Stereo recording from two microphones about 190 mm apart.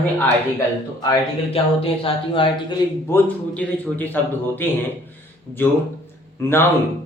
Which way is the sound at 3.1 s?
10° left (ahead or behind).